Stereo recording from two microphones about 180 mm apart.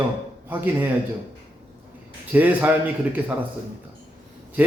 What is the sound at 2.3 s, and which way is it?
Speech, 10° right (ahead or behind).